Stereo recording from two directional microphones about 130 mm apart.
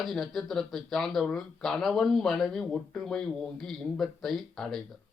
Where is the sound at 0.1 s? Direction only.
Centre (ahead or behind).